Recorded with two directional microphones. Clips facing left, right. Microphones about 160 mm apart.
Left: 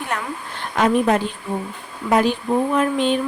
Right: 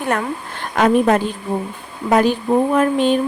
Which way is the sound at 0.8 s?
50° right (ahead or behind).